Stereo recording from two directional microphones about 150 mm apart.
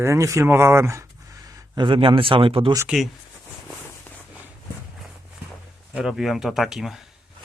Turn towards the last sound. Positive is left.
turn(degrees=0)  # may be behind; listen again after turning